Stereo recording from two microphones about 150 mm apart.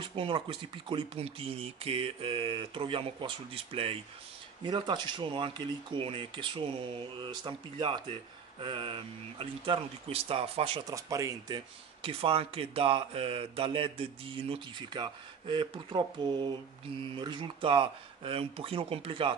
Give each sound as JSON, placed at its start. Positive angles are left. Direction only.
{"t": 0.0, "sound": "speech", "side_deg": -35}
{"t": 10.9, "sound": "speech", "side_deg": -20}
{"t": 17.1, "sound": "speech", "side_deg": -30}